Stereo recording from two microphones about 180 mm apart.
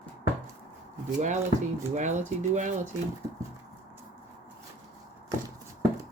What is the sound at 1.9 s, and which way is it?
Speech, 45° right (ahead or behind).